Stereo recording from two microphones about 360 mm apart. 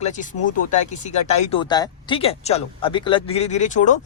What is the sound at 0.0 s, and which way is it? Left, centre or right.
Speech, left.